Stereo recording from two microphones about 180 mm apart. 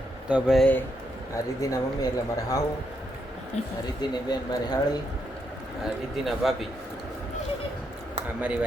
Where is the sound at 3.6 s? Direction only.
40° left (ahead or behind).